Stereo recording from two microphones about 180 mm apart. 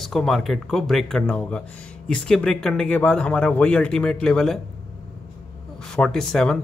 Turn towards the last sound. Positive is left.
turn(degrees=5)  # may be behind; listen again after turning